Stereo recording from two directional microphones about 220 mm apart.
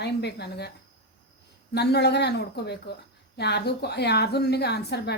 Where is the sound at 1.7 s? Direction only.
50° left (ahead or behind).